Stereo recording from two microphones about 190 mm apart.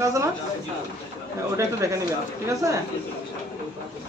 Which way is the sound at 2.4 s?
15° right (ahead or behind).